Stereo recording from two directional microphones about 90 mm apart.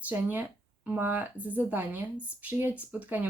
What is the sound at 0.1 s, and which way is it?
Speech, 20° right (ahead or behind).